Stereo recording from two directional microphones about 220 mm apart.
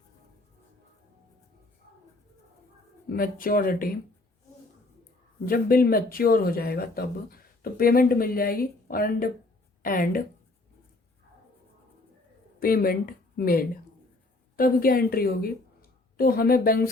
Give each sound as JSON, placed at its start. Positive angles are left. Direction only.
{"t": 3.1, "sound": "speech", "side_deg": 40}
{"t": 5.5, "sound": "speech", "side_deg": 40}
{"t": 12.5, "sound": "a woman's voice", "side_deg": 40}